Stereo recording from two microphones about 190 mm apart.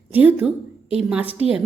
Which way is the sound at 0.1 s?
10° right (ahead or behind).